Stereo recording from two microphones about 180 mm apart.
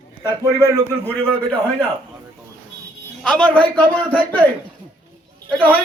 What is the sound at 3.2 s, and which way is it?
Speech, 5° left (ahead or behind).